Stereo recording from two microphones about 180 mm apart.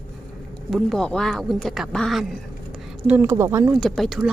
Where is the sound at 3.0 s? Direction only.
10° right (ahead or behind).